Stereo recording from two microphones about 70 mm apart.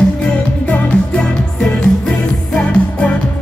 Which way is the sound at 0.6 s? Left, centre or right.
Centre.